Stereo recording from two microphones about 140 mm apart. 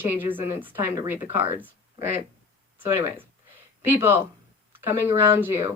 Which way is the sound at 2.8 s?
15° right (ahead or behind).